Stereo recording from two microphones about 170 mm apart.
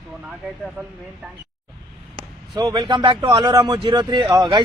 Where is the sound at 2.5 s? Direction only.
25° right (ahead or behind).